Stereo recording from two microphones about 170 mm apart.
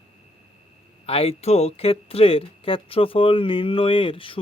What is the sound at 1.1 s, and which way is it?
Speech, 35° left (ahead or behind).